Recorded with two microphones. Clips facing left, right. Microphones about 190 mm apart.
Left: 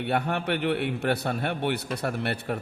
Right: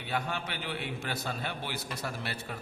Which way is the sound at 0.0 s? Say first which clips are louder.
Left 8 dB; 60° left (ahead or behind).